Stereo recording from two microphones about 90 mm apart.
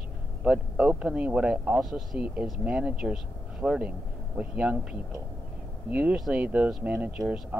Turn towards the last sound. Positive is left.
turn(degrees=-15)  # may be behind; listen again after turning